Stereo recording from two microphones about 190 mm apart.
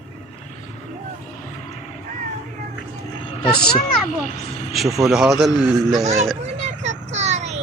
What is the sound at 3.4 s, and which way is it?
Speech, 25° left (ahead or behind).